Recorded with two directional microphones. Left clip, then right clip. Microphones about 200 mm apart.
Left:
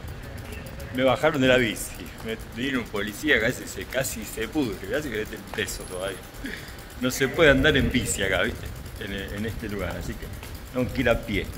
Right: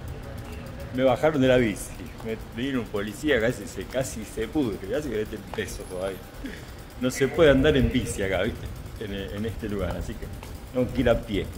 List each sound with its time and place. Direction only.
0.9 s speech: 5° right (ahead or behind)